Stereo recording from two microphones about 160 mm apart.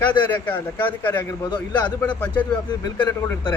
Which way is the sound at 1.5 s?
25° left (ahead or behind).